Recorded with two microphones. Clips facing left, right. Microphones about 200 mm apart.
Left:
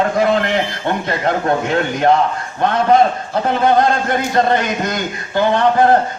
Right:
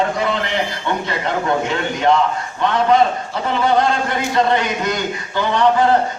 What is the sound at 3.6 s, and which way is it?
A man's voice, 50° left (ahead or behind).